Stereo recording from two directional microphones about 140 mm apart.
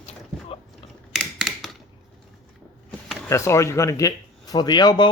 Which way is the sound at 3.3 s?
20° left (ahead or behind).